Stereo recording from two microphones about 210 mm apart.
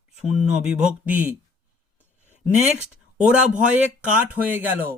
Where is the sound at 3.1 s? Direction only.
5° right (ahead or behind).